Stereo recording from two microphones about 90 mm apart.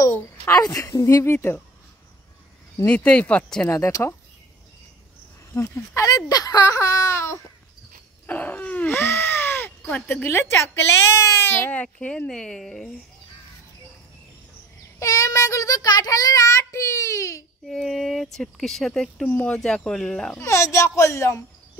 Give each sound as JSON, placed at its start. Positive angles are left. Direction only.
{"t": 0.0, "sound": "a sound", "side_deg": 35}
{"t": 0.7, "sound": "speech", "side_deg": 35}
{"t": 2.9, "sound": "speech", "side_deg": 15}
{"t": 3.7, "sound": "child singing", "side_deg": 35}
{"t": 5.5, "sound": "child singing", "side_deg": 30}
{"t": 8.3, "sound": "a sound", "side_deg": 20}
{"t": 10.0, "sound": "speech", "side_deg": 25}
{"t": 11.7, "sound": "speech", "side_deg": 15}
{"t": 15.0, "sound": "child singing", "side_deg": 40}
{"t": 17.6, "sound": "speech", "side_deg": 5}
{"t": 19.2, "sound": "speech", "side_deg": 15}
{"t": 20.4, "sound": "child singing", "side_deg": 30}